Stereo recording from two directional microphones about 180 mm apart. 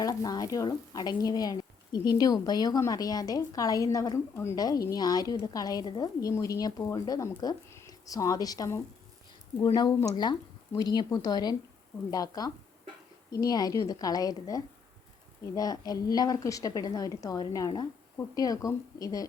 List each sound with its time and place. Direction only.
0.0 s speech: 20° left (ahead or behind)